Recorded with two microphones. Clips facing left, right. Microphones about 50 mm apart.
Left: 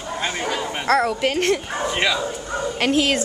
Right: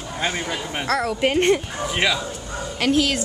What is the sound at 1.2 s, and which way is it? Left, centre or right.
Speech, centre.